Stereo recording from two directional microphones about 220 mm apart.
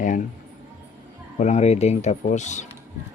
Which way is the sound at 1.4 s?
30° left (ahead or behind).